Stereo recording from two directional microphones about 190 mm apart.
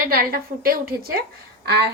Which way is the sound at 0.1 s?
50° right (ahead or behind).